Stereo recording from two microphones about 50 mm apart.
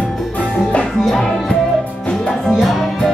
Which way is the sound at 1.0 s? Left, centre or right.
Centre.